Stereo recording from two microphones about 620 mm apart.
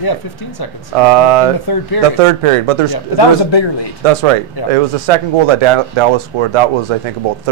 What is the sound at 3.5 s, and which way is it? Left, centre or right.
Speech, left.